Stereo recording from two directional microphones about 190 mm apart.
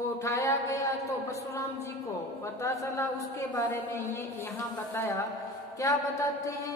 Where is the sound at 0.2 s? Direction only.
15° left (ahead or behind).